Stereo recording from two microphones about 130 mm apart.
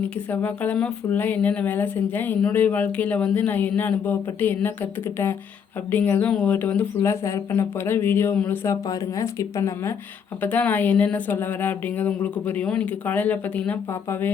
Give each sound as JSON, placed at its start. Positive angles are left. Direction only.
{"t": 0.3, "sound": "speech", "side_deg": 10}
{"t": 7.0, "sound": "speech", "side_deg": 20}
{"t": 8.6, "sound": "speech", "side_deg": 25}
{"t": 10.4, "sound": "speech", "side_deg": 15}